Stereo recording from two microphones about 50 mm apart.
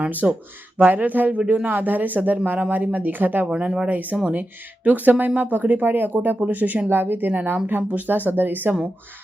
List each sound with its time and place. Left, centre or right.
0.1 s speech: right
1.4 s speech: centre
1.6 s speech: right
3.5 s speech: centre
3.8 s speech: right